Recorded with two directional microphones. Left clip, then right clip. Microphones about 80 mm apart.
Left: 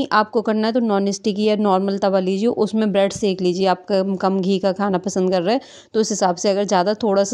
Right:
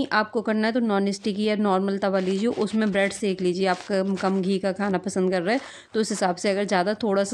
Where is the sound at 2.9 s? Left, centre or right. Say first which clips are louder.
Left 6 dB; left.